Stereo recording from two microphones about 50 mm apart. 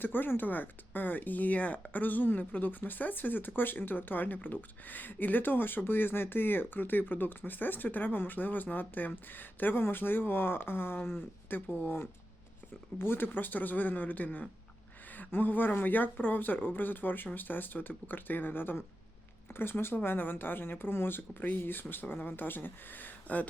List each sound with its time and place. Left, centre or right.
0.0 s speech: left
13.0 s speech: left